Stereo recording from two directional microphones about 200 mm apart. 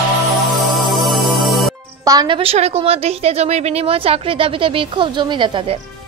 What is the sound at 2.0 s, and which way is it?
Speech, 20° right (ahead or behind).